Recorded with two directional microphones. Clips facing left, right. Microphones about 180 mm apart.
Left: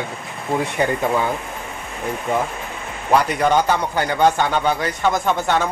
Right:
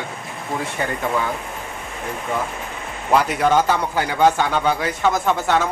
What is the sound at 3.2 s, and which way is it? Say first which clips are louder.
Speech: even; 5° right (ahead or behind).